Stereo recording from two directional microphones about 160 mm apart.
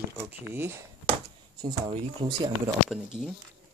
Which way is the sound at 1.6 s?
30° right (ahead or behind).